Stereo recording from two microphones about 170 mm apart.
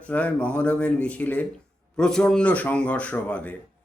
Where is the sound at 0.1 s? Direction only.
10° left (ahead or behind).